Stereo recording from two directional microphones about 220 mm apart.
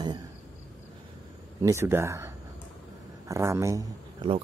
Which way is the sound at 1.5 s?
15° right (ahead or behind).